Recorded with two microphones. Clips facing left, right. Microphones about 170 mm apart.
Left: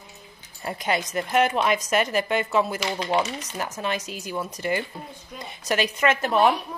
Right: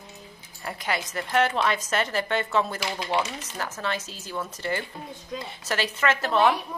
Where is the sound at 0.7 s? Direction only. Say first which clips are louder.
Left 4 dB; 20° left (ahead or behind).